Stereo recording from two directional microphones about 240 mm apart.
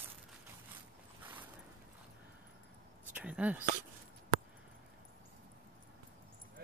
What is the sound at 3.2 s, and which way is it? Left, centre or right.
Speech, centre.